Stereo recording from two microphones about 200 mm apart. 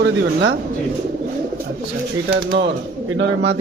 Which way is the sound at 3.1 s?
60° right (ahead or behind).